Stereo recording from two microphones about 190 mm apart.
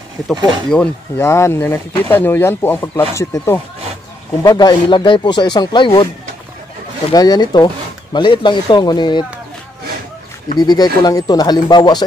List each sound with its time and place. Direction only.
0.7 s speech: 10° left (ahead or behind); by 6.0 s 25° left (ahead or behind)
7.1 s speech: 20° left (ahead or behind)
10.6 s speech: 20° left (ahead or behind)